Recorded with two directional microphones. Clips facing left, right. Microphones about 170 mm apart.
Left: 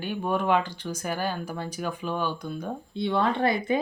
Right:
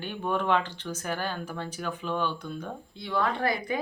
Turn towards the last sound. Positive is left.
turn(degrees=25)  # may be behind; listen again after turning